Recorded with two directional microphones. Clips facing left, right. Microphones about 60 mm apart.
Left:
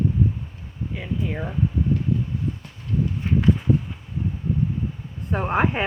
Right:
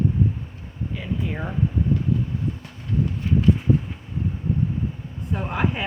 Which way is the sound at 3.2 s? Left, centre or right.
Left.